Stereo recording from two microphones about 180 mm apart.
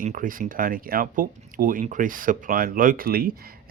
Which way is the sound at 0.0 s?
50° right (ahead or behind).